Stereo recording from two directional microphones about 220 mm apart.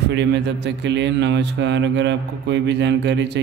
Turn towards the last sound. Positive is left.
turn(degrees=-50)  # may be behind; listen again after turning